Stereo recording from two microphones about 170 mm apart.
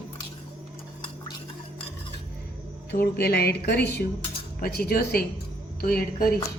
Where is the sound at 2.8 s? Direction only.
65° left (ahead or behind).